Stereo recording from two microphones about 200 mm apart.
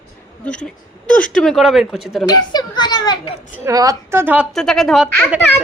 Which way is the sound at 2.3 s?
20° left (ahead or behind).